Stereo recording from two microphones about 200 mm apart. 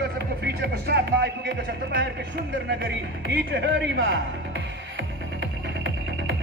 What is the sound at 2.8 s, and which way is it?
Speech, 55° right (ahead or behind).